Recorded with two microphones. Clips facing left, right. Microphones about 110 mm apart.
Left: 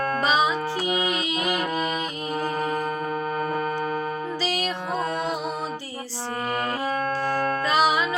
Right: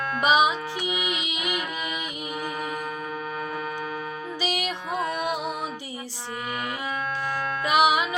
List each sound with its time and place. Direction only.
0.2 s music: 15° right (ahead or behind)
1.4 s music: 40° left (ahead or behind)
4.4 s music: 15° right (ahead or behind)
7.6 s music: 15° right (ahead or behind)